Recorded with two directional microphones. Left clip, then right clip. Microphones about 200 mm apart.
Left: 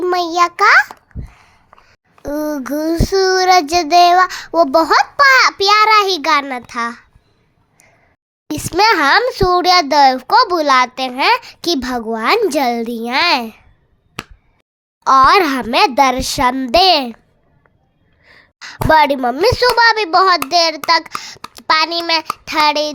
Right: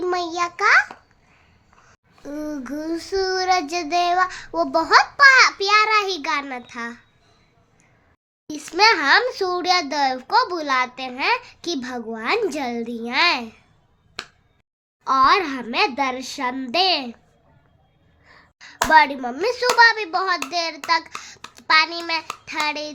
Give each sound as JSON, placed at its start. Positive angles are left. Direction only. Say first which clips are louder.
{"t": 0.0, "sound": "child singing", "louder": "left 9 dB", "side_deg": 35}
{"t": 1.1, "sound": "a sound", "louder": "left 19 dB", "side_deg": 40}
{"t": 2.2, "sound": "child singing", "louder": "left 10 dB", "side_deg": 45}
{"t": 8.4, "sound": "a child's voice", "louder": "left 4 dB", "side_deg": 50}
{"t": 15.0, "sound": "a child's voice", "louder": "left 7 dB", "side_deg": 55}
{"t": 18.2, "sound": "a sound", "louder": "left 5 dB", "side_deg": 20}
{"t": 18.6, "sound": "a child's voice", "louder": "left 4 dB", "side_deg": 50}